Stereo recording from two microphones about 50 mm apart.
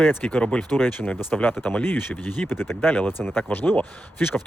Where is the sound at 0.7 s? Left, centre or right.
Left.